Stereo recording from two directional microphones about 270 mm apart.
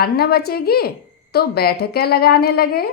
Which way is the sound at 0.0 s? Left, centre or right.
Left.